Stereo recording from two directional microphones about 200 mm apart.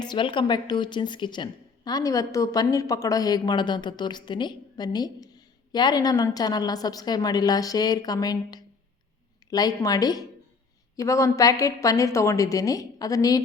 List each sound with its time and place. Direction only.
0.0 s a woman's voice: 25° left (ahead or behind)